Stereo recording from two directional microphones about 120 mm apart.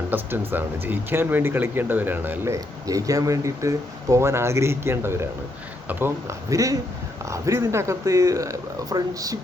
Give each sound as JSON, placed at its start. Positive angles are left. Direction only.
{"t": 0.1, "sound": "speech", "side_deg": -15}